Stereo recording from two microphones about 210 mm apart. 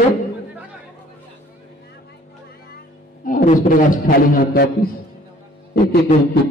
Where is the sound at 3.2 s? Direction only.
40° left (ahead or behind).